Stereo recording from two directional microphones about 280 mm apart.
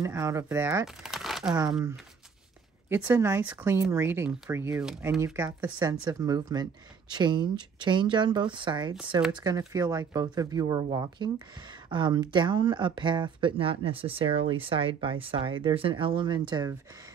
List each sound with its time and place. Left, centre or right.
0.0 s speech: centre
2.9 s speech: centre